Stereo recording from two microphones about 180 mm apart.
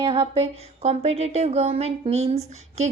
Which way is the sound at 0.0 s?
30° right (ahead or behind).